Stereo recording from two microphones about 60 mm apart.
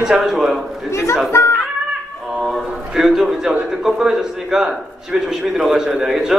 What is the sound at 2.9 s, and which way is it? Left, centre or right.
A man's voice, centre.